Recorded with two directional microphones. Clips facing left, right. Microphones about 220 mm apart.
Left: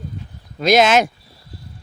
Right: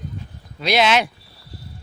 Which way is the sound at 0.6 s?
45° left (ahead or behind).